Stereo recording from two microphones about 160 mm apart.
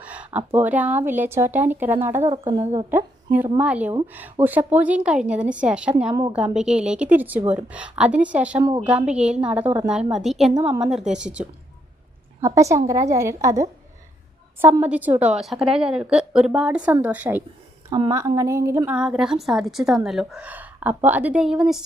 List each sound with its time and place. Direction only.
0.0 s a woman's voice: 10° right (ahead or behind)
12.4 s a woman's voice: 20° right (ahead or behind)
17.8 s a woman's voice: 25° right (ahead or behind)
18.9 s a woman's voice: 5° right (ahead or behind)